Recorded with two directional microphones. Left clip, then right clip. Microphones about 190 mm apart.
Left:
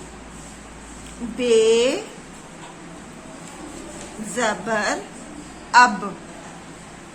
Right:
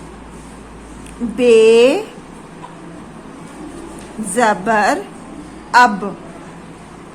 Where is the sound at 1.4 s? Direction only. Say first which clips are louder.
Right 8 dB; 30° right (ahead or behind).